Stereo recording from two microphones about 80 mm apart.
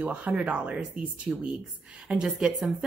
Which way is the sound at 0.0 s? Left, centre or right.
Centre.